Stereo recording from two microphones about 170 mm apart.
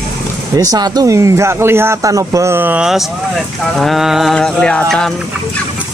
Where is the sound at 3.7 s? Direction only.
Centre (ahead or behind).